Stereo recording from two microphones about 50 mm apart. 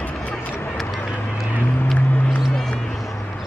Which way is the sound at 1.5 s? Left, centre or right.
Left.